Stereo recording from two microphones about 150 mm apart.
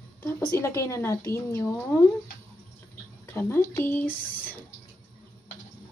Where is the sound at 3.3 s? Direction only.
15° left (ahead or behind).